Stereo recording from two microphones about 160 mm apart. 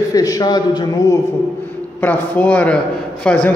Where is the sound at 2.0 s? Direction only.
10° left (ahead or behind).